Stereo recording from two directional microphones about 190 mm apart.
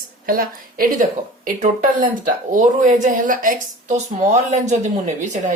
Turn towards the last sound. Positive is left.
turn(degrees=-40)  # may be behind; listen again after turning